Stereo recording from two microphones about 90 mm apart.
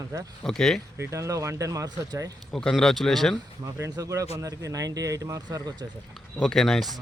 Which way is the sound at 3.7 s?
35° right (ahead or behind).